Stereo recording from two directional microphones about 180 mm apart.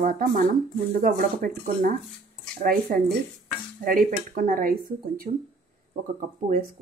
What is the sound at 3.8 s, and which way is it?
Speech, 50° right (ahead or behind).